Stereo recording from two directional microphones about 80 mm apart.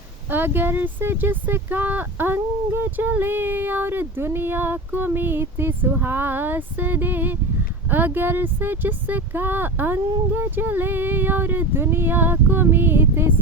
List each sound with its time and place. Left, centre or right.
0.3 s speech: right